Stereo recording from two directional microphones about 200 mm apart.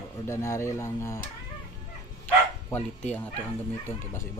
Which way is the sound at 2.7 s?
5° left (ahead or behind).